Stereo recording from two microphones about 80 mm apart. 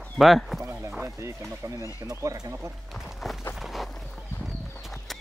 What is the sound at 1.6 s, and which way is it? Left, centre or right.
Speech, right.